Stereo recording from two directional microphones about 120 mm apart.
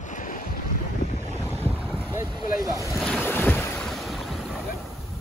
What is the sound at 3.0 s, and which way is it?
Ocean, centre (ahead or behind).